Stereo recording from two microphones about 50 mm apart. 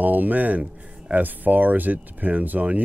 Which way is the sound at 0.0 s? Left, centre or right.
Right.